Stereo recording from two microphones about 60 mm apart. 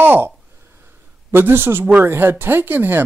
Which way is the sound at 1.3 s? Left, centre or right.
Right.